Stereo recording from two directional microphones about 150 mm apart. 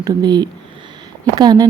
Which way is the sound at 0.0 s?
30° right (ahead or behind).